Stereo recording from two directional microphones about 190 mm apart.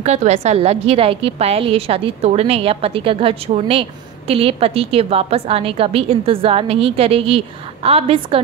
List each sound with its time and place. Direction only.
0.0 s a woman's voice: 35° right (ahead or behind)